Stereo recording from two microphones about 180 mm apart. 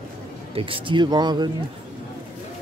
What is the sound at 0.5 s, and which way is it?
Speech, 30° right (ahead or behind).